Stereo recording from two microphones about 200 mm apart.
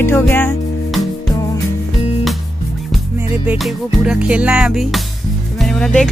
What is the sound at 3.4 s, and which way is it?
Speech, 5° right (ahead or behind).